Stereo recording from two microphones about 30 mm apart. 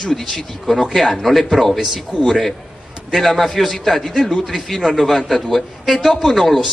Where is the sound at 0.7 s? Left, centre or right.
Centre; by 4.5 s left.